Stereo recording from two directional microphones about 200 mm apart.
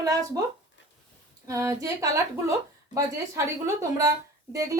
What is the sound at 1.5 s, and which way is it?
A woman's voice, 15° right (ahead or behind).